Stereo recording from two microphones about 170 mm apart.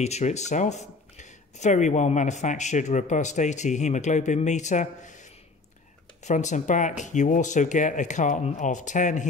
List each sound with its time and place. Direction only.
0.0 s speech: 40° left (ahead or behind)
6.2 s speech: 45° left (ahead or behind)